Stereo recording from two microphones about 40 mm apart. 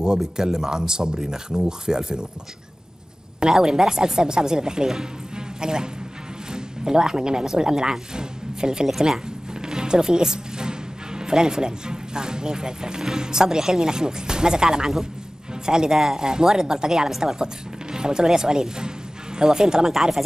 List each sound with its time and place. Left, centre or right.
0.0 s speech: centre
3.3 s speech: centre